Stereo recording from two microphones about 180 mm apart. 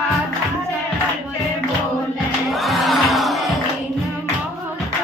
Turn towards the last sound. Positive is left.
turn(degrees=0)  # may be behind; listen again after turning